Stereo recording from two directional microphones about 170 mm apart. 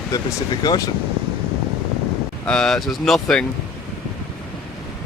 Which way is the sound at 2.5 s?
5° left (ahead or behind).